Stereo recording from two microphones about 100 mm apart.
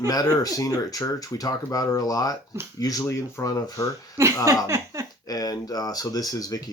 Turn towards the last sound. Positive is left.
turn(degrees=40)  # may be behind; listen again after turning